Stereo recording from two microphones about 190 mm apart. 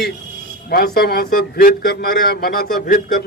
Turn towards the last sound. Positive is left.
turn(degrees=50)  # may be behind; listen again after turning